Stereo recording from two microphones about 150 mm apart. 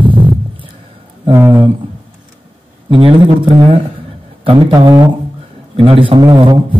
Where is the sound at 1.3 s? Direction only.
15° right (ahead or behind).